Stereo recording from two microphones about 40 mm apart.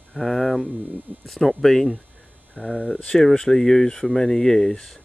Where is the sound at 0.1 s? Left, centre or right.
Centre.